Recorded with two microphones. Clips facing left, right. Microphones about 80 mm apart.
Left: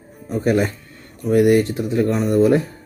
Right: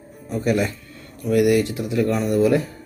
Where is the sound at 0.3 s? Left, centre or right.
Left.